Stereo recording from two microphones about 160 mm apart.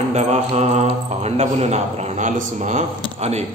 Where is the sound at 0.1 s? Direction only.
45° right (ahead or behind).